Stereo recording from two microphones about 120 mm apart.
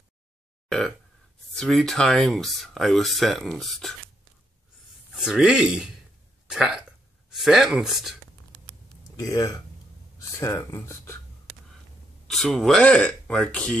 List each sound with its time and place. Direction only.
0.7 s speech: 5° left (ahead or behind)
5.2 s speech: 5° right (ahead or behind)
9.2 s speech: 30° left (ahead or behind)
12.3 s speech: centre (ahead or behind)